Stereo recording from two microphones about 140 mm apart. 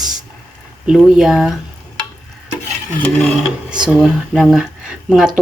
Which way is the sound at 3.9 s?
Centre (ahead or behind).